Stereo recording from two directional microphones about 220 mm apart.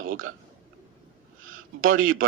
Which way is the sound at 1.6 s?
65° right (ahead or behind).